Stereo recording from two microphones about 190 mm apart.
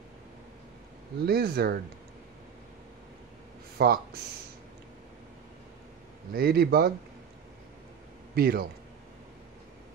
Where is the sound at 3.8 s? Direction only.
55° right (ahead or behind).